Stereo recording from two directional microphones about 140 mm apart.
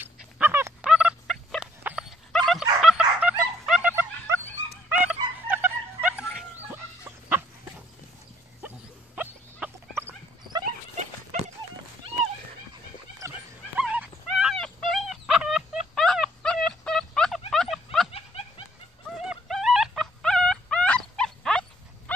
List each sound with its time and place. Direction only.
0.0 s dog: 15° right (ahead or behind)
0.8 s turkey: 5° right (ahead or behind)
1.8 s dog: 15° right (ahead or behind)
2.0 s dog: centre (ahead or behind)
3.9 s a sound: 15° right (ahead or behind)
4.9 s music: 10° right (ahead or behind)
6.7 s chicken: 15° right (ahead or behind)
8.6 s dog: 10° right (ahead or behind)
11.3 s dog: 60° right (ahead or behind)
13.7 s dog: 10° right (ahead or behind)
14.2 s a sound: centre (ahead or behind)
18.1 s snicker: 45° left (ahead or behind)
19.2 s dog: centre (ahead or behind)